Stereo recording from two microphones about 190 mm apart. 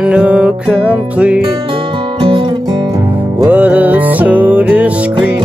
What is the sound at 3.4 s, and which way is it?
Music, 10° right (ahead or behind).